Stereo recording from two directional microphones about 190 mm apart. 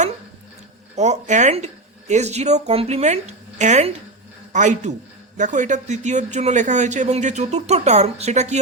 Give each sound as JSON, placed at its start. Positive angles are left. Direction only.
{"t": 0.9, "sound": "speech", "side_deg": -35}